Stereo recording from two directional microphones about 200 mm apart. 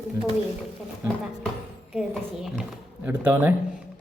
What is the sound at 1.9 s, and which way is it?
Speech, 5° right (ahead or behind).